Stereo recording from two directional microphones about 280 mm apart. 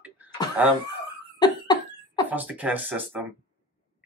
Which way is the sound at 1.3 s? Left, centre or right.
Centre.